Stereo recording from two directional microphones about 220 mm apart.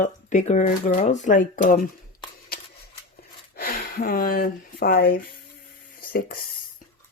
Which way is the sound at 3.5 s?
45° left (ahead or behind).